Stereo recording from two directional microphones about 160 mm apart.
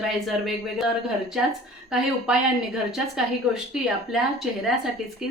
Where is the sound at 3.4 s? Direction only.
5° right (ahead or behind).